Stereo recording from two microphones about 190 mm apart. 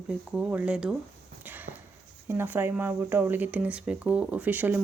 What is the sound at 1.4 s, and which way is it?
Clip-clop, 10° right (ahead or behind).